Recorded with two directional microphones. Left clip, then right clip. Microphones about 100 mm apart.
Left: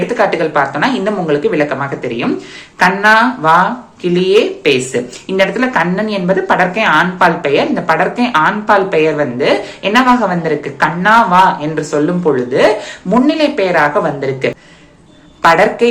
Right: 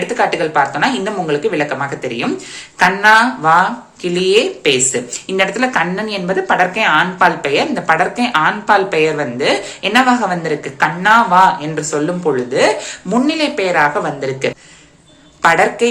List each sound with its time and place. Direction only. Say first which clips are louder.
0.1 s speech: left 2 dB; 20° right (ahead or behind)